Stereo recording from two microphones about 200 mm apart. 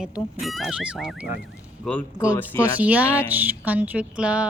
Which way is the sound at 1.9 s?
5° left (ahead or behind).